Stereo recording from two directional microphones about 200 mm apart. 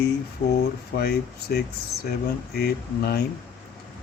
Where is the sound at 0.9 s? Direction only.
55° left (ahead or behind).